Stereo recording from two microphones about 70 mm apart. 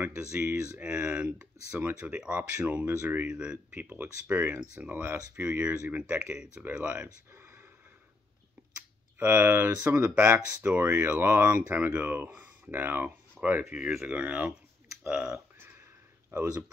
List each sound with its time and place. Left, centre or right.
0.0 s speech: right
3.3 s speech: centre
3.9 s speech: right
7.3 s a sound: right
9.2 s speech: right
13.7 s speech: centre
14.0 s speech: centre
16.3 s speech: right